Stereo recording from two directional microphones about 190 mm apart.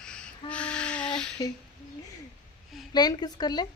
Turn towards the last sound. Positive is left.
turn(degrees=20)  # may be behind; listen again after turning